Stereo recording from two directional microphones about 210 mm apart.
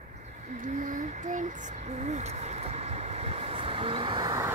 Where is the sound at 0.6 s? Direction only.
40° right (ahead or behind).